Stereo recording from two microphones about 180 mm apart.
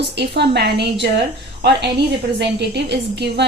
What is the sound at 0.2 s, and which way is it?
A woman's voice, 65° right (ahead or behind).